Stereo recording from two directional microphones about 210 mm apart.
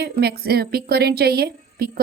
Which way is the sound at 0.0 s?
50° right (ahead or behind).